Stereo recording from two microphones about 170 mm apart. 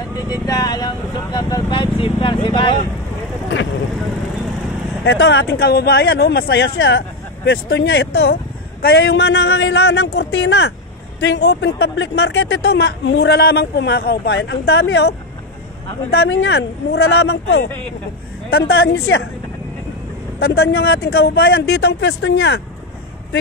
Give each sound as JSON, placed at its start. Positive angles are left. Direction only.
{"t": 0.3, "sound": "vehicle", "side_deg": 25}
{"t": 5.0, "sound": "a man's voice", "side_deg": 90}
{"t": 18.5, "sound": "speech", "side_deg": 70}
{"t": 20.3, "sound": "speech", "side_deg": 75}